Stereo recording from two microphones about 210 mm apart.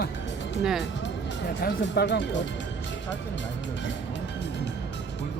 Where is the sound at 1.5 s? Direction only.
55° left (ahead or behind).